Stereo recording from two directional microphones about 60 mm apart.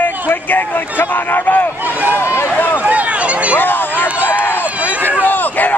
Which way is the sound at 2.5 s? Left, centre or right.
Left.